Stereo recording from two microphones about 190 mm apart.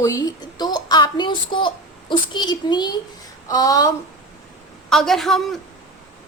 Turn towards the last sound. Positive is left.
turn(degrees=0)  # may be behind; listen again after turning